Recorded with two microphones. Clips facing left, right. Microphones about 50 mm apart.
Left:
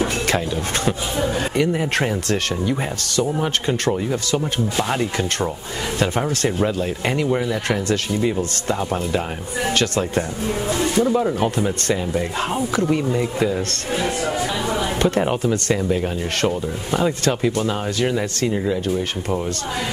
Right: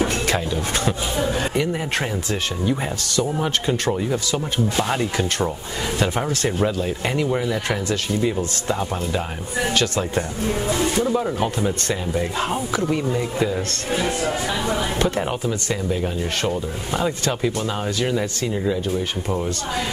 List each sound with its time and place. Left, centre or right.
4.7 s speech: centre
7.2 s speech: centre
10.1 s speech: centre
13.5 s speech: centre
17.3 s speech: left
17.6 s speech: centre